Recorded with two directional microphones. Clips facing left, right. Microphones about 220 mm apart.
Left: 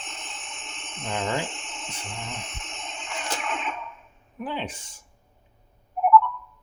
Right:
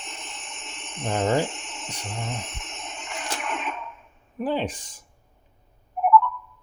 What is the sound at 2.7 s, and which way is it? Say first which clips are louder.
Music: left 1 dB; centre (ahead or behind).